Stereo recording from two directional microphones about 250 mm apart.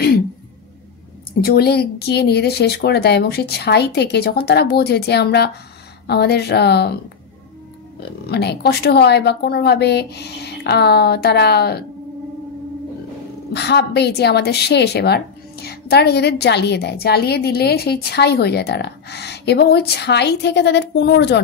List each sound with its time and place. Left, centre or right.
1.4 s a woman's voice: left
8.0 s a woman's voice: left
13.5 s a woman's voice: left